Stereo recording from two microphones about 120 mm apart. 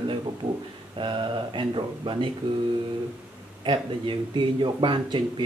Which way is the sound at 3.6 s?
45° right (ahead or behind).